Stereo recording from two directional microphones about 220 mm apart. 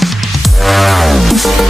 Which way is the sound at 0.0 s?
Centre (ahead or behind).